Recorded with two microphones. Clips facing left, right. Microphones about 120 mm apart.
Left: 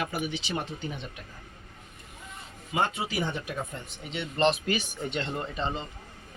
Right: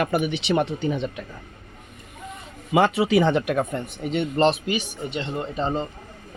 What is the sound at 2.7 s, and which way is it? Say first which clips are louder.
Speech: right 10 dB; 90° right.